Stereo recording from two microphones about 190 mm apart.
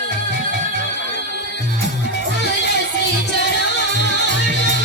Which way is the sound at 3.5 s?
65° left (ahead or behind).